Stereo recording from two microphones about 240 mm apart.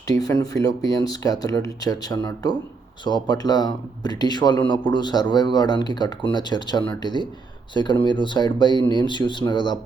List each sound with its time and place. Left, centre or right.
0.2 s speech: centre